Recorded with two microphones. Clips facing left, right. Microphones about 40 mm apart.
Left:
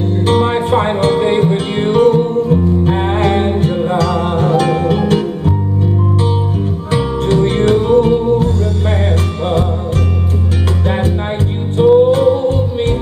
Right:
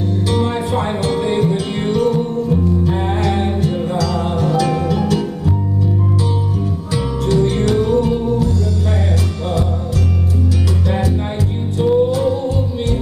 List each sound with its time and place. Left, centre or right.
0.3 s music: left
6.9 s music: left
11.8 s music: left